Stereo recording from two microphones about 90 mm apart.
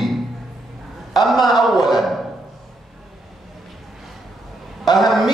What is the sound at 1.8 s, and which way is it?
Mantra, centre (ahead or behind).